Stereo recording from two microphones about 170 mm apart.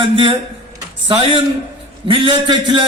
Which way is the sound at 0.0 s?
30° right (ahead or behind).